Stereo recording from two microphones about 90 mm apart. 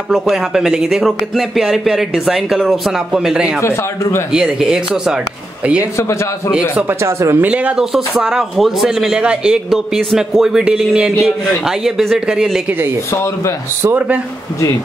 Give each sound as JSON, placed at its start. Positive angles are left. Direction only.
{"t": 0.1, "sound": "speech", "side_deg": -5}
{"t": 5.9, "sound": "a man's voice", "side_deg": 35}
{"t": 6.7, "sound": "speech", "side_deg": -15}
{"t": 7.0, "sound": "speech", "side_deg": -30}
{"t": 7.4, "sound": "speech", "side_deg": -15}
{"t": 13.1, "sound": "a man's voice", "side_deg": 30}
{"t": 13.8, "sound": "speech", "side_deg": -20}